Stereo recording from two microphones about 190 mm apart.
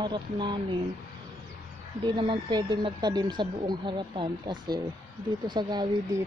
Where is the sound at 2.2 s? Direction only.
25° right (ahead or behind).